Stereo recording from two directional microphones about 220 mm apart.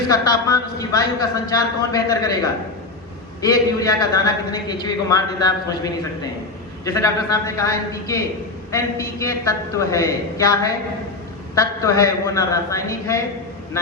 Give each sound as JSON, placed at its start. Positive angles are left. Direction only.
{"t": 0.1, "sound": "a man's voice", "side_deg": 15}
{"t": 3.4, "sound": "a man's voice", "side_deg": 15}